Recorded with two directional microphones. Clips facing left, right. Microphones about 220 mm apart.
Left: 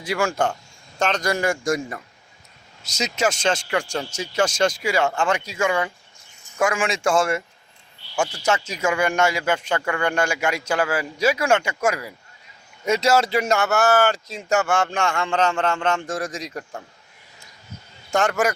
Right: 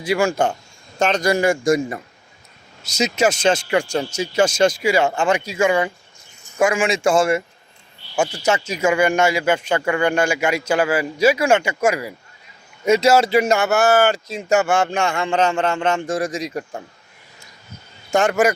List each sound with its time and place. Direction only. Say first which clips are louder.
0.0 s a man's voice: right 4 dB; 5° right (ahead or behind)
8.1 s speech: right 3 dB; 15° right (ahead or behind)
8.4 s a man's voice: right 3 dB; 5° right (ahead or behind)
15.1 s speech: right 3 dB; 15° right (ahead or behind)
15.8 s a man's voice: right 4 dB; centre (ahead or behind)
18.1 s a man's voice: right 4 dB; 5° right (ahead or behind)